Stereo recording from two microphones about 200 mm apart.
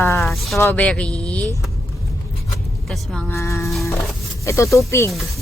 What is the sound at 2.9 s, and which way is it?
Speech, centre (ahead or behind).